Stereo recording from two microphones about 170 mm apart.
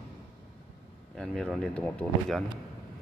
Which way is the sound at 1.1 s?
5° left (ahead or behind).